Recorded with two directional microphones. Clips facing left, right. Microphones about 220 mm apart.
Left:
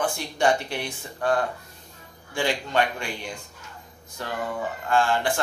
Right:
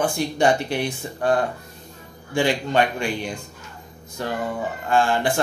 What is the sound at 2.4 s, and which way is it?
A man's voice, 20° right (ahead or behind).